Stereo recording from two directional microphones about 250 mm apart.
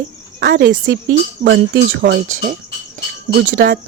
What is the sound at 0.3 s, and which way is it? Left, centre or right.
Speech, right.